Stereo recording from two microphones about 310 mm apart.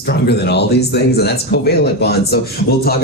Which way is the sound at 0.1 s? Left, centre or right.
Left.